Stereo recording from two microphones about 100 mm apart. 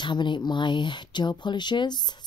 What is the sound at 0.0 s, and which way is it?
Speech, 50° left (ahead or behind).